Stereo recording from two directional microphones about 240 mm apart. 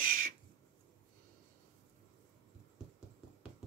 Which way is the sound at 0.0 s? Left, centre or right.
Right.